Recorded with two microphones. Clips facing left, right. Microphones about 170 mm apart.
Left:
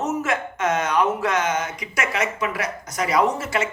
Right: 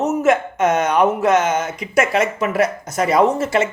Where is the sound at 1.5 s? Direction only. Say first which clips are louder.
Right 8 dB; 50° right (ahead or behind).